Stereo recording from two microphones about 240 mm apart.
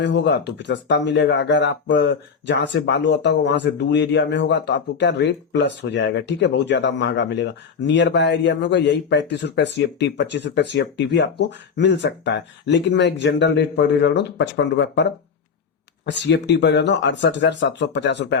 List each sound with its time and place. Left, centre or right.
0.0 s speech: left
16.0 s speech: left